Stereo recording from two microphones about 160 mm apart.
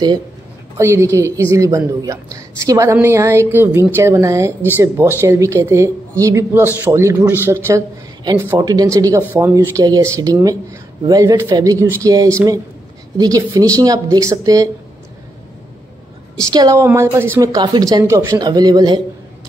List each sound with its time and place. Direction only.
0.7 s a woman's voice: 15° right (ahead or behind)
8.2 s a woman's voice: 25° right (ahead or behind)
16.3 s a woman's voice: 20° right (ahead or behind)